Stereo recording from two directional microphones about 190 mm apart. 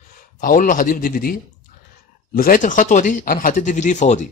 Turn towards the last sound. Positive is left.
turn(degrees=40)  # may be behind; listen again after turning